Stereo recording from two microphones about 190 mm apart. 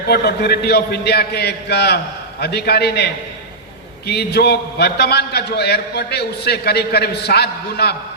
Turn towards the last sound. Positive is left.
turn(degrees=60)  # may be behind; listen again after turning